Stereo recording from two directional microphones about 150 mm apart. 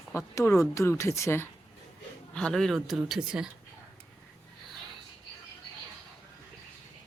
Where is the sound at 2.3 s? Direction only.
5° left (ahead or behind).